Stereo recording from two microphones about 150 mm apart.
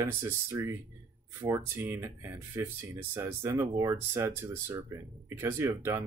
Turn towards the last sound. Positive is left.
turn(degrees=-15)  # may be behind; listen again after turning